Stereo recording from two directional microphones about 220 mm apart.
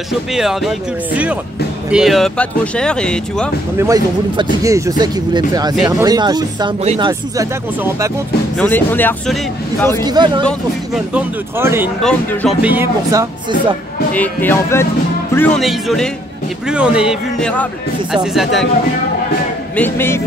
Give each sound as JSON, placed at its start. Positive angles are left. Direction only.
{"t": 0.3, "sound": "speech", "side_deg": 0}
{"t": 3.7, "sound": "speech", "side_deg": -15}
{"t": 7.1, "sound": "speech", "side_deg": -15}
{"t": 8.5, "sound": "speech", "side_deg": 10}
{"t": 10.0, "sound": "speech", "side_deg": -20}
{"t": 12.0, "sound": "speech", "side_deg": 5}
{"t": 12.6, "sound": "speech", "side_deg": -10}
{"t": 14.1, "sound": "speech", "side_deg": 10}
{"t": 19.7, "sound": "speech", "side_deg": 10}